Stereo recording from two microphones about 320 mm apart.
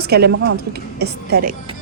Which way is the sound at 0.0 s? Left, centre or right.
Right.